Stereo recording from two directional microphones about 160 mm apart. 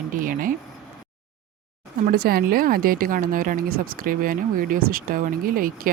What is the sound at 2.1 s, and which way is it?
A woman's voice, 75° right (ahead or behind).